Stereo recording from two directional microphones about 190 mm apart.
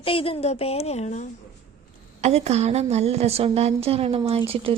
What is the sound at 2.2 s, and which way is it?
A woman's voice, 35° right (ahead or behind).